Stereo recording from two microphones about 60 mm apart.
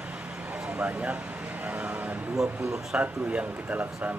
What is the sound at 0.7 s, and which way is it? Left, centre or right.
Speech, right.